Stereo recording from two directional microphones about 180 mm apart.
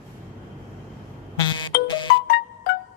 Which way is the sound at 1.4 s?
25° left (ahead or behind).